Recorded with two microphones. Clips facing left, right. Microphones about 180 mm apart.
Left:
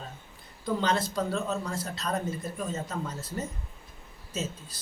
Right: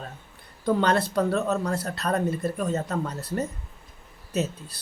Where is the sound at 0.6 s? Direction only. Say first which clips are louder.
Right 5 dB; 60° right (ahead or behind).